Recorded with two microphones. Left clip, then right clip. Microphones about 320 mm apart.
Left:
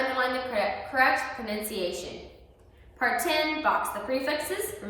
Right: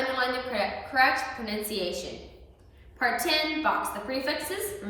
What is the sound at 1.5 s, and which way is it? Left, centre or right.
A woman's voice, centre.